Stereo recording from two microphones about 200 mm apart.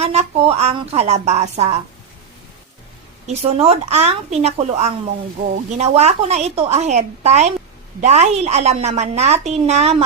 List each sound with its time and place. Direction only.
0.0 s a woman's voice: 30° right (ahead or behind)
3.2 s a woman's voice: 30° right (ahead or behind)